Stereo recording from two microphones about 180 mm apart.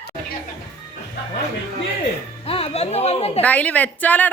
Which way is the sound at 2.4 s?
35° left (ahead or behind).